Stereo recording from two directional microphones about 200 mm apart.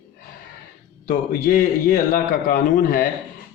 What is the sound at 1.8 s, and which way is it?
A man's voice, 45° left (ahead or behind).